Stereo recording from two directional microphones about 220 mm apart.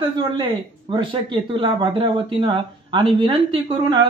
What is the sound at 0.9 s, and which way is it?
Speech, 20° right (ahead or behind).